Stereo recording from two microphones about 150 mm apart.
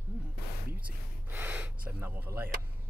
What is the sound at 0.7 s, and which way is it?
Speech, 10° right (ahead or behind).